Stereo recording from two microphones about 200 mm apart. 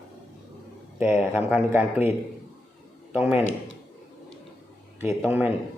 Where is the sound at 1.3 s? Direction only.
10° right (ahead or behind).